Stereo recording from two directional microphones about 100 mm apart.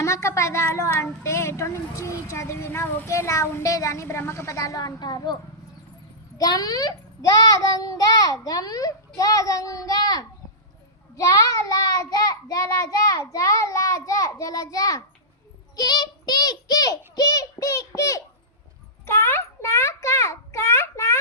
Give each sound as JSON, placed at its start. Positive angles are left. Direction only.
{"t": 0.0, "sound": "a child's voice", "side_deg": 30}
{"t": 15.7, "sound": "child singing", "side_deg": 45}
{"t": 19.0, "sound": "a sound", "side_deg": 25}